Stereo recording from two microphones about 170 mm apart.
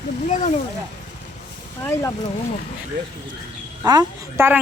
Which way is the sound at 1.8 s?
15° left (ahead or behind).